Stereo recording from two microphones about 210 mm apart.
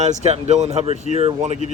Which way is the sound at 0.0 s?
30° right (ahead or behind).